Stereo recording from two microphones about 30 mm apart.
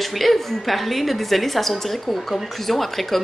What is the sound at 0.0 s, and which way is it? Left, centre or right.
A woman's voice, centre.